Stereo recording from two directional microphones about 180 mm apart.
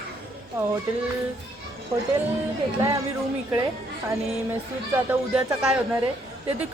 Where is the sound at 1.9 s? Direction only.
25° right (ahead or behind).